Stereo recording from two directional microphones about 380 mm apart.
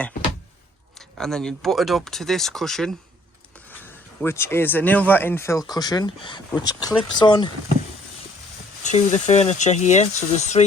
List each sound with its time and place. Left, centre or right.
0.9 s speech: centre
8.8 s speech: centre